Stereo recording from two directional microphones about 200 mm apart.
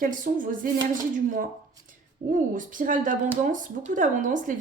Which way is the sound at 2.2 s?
40° right (ahead or behind).